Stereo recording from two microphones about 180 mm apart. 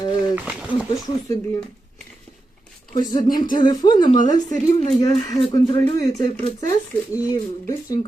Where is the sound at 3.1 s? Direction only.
25° left (ahead or behind).